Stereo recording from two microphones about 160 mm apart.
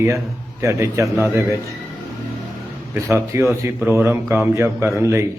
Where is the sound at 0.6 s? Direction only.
20° right (ahead or behind).